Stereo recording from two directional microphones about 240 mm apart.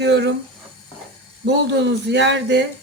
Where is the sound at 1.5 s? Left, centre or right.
Right.